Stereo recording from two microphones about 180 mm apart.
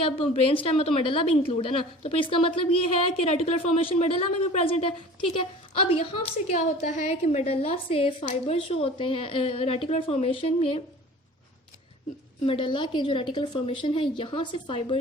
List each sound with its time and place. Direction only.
0.0 s speech: 30° left (ahead or behind)
12.5 s a woman's voice: 30° left (ahead or behind)